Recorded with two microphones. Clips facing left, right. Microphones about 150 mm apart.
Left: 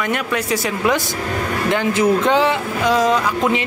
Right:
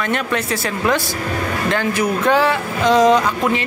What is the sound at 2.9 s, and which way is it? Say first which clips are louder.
Speech: right 4 dB; 5° left (ahead or behind).